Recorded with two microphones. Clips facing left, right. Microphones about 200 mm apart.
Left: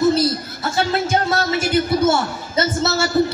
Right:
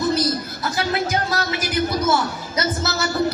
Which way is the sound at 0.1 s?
25° left (ahead or behind).